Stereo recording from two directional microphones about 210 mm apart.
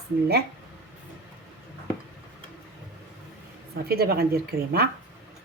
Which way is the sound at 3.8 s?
50° right (ahead or behind).